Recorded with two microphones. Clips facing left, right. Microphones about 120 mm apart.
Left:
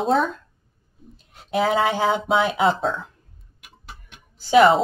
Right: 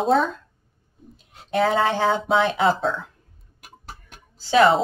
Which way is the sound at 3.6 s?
40° right (ahead or behind).